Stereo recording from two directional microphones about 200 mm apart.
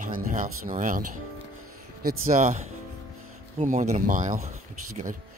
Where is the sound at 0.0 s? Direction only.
40° right (ahead or behind).